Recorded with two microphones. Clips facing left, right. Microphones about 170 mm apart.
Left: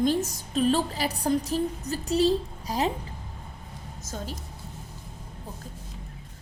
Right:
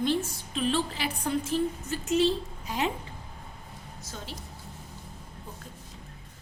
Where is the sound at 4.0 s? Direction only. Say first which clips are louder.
Left 6 dB; 45° left (ahead or behind).